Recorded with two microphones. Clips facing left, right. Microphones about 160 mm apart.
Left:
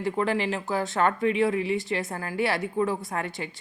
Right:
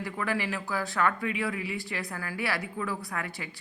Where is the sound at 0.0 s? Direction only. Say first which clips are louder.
Left 6 dB; 25° left (ahead or behind).